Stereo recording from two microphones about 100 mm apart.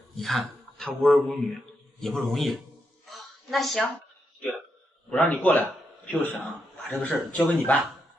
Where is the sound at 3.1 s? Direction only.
Centre (ahead or behind).